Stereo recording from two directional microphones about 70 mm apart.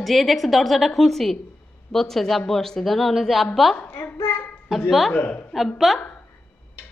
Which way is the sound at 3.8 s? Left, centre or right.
Left.